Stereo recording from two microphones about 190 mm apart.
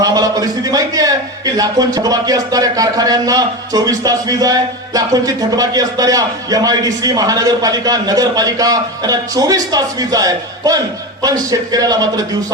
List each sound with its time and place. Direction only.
0.0 s a man's voice: 20° right (ahead or behind)